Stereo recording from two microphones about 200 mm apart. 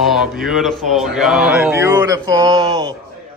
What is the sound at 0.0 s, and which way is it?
Speech, centre (ahead or behind).